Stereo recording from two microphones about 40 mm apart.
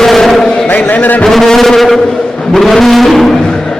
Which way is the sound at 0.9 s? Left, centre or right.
Left.